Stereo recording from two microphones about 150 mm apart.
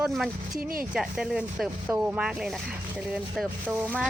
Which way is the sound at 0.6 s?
70° right (ahead or behind).